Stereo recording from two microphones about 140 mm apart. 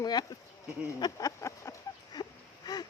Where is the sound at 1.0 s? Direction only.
25° left (ahead or behind).